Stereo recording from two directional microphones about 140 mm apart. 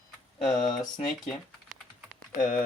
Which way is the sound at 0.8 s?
50° left (ahead or behind).